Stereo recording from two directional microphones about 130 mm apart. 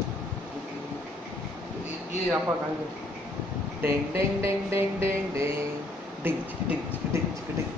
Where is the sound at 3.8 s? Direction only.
20° right (ahead or behind).